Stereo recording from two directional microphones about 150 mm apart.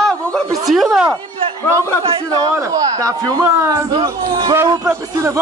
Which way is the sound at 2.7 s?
20° right (ahead or behind).